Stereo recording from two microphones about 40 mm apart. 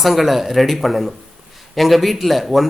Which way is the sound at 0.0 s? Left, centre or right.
Centre.